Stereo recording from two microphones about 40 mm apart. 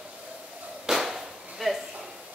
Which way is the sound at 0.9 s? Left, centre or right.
Centre.